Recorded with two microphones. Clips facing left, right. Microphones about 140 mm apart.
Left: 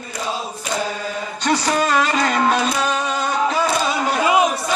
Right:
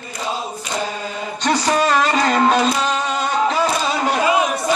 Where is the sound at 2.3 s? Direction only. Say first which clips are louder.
Right 4 dB; 25° right (ahead or behind).